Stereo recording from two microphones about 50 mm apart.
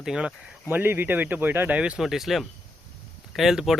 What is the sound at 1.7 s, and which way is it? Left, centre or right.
Speech, right.